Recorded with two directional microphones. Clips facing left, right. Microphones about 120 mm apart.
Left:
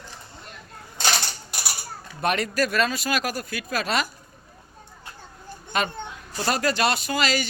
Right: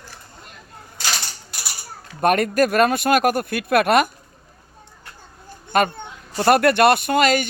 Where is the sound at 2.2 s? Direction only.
50° right (ahead or behind).